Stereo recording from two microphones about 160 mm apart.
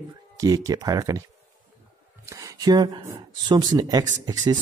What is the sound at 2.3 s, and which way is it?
Speech, 20° right (ahead or behind).